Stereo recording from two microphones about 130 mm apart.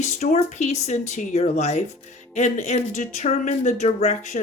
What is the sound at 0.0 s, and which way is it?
Speech, 60° left (ahead or behind).